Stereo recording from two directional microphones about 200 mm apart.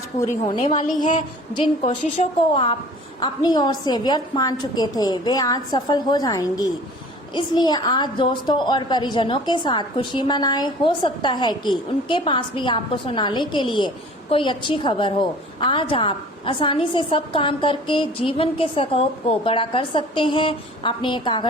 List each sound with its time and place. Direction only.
0.4 s a woman's voice: 20° left (ahead or behind)